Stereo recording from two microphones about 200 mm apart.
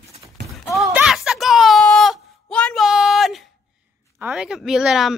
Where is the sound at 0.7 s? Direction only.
Centre (ahead or behind).